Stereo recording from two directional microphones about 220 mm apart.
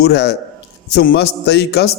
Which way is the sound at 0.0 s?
50° left (ahead or behind).